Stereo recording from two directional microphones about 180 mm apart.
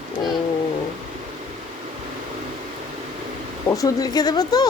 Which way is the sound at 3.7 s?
20° left (ahead or behind).